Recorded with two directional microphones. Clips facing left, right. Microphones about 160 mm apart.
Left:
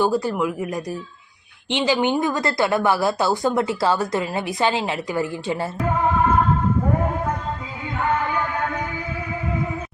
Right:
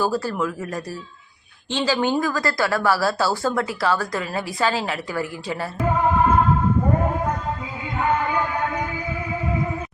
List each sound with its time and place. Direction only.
0.0 s a woman's voice: 15° left (ahead or behind)